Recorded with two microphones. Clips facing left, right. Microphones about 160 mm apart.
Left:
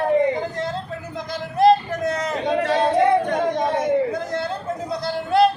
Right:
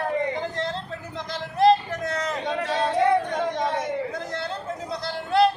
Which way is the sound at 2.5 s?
60° left (ahead or behind).